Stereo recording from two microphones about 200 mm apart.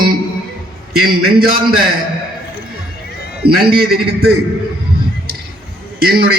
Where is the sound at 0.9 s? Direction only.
50° right (ahead or behind).